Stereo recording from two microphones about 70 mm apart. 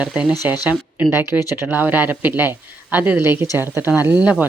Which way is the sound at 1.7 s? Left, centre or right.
Right.